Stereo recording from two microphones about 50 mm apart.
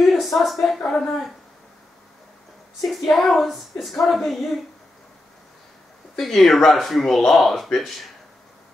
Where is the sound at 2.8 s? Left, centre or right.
Centre.